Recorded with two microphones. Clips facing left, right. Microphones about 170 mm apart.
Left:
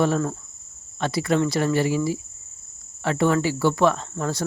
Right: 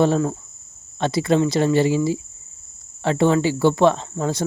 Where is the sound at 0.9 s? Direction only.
25° right (ahead or behind).